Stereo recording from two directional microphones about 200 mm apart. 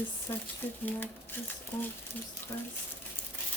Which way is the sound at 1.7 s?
10° left (ahead or behind).